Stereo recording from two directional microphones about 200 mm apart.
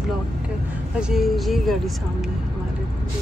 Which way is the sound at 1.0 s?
Centre (ahead or behind).